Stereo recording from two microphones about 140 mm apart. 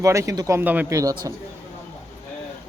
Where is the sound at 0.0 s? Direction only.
20° right (ahead or behind).